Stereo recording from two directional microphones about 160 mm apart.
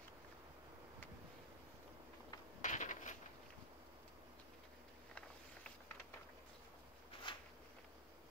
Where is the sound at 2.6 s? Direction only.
50° left (ahead or behind).